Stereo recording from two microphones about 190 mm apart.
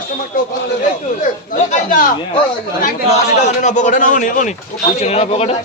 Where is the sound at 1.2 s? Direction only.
40° left (ahead or behind).